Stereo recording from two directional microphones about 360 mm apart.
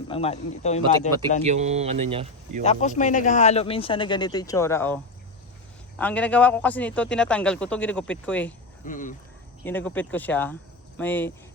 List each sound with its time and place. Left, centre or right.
0.1 s speech: centre
1.5 s speech: centre
2.6 s speech: centre
6.0 s speech: centre
8.8 s speech: left
9.6 s speech: centre